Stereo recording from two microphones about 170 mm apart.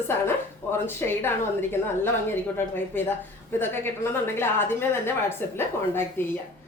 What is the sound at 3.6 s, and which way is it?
A woman's voice, 15° left (ahead or behind).